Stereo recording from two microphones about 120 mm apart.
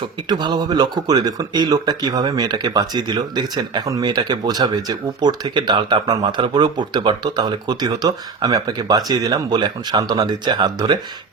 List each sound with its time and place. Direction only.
0.3 s speech: 35° right (ahead or behind)